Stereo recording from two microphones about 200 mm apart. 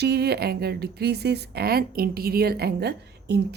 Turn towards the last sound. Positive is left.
turn(degrees=-55)  # may be behind; listen again after turning